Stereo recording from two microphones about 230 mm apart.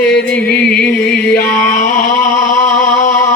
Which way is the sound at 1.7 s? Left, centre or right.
Left.